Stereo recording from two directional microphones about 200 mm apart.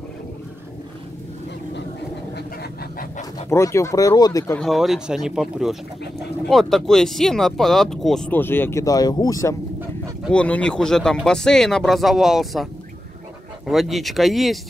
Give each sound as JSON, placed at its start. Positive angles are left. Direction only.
{"t": 3.4, "sound": "speech", "side_deg": 15}
{"t": 4.6, "sound": "speech", "side_deg": 0}
{"t": 10.3, "sound": "speech", "side_deg": 5}
{"t": 13.7, "sound": "speech", "side_deg": 0}